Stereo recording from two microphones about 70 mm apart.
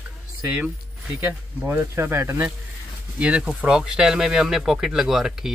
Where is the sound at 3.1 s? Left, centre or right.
Centre.